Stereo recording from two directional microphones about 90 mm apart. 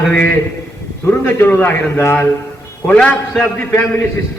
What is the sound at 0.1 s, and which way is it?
A man's voice, 20° left (ahead or behind).